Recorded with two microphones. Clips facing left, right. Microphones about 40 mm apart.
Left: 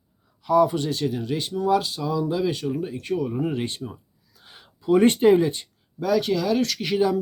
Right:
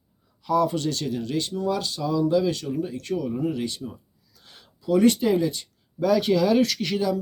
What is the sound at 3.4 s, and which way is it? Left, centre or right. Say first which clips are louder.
Speech: left 1 dB; left.